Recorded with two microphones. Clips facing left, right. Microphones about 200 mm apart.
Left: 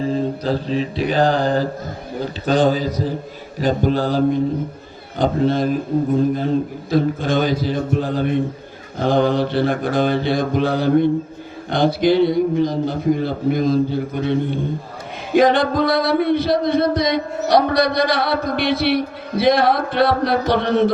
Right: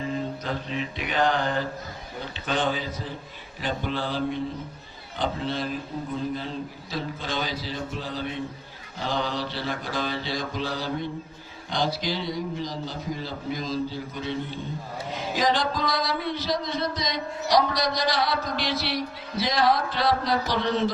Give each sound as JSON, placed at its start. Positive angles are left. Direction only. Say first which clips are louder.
{"t": 0.0, "sound": "mantra", "louder": "left 9 dB", "side_deg": 35}
{"t": 3.6, "sound": "a man's voice", "louder": "left 11 dB", "side_deg": 40}
{"t": 9.0, "sound": "a sound", "louder": "left 12 dB", "side_deg": 55}